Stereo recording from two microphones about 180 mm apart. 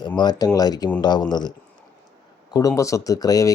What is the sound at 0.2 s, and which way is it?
Speech, 20° left (ahead or behind).